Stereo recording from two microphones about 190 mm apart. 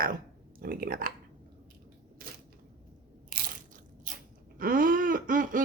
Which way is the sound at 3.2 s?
45° right (ahead or behind).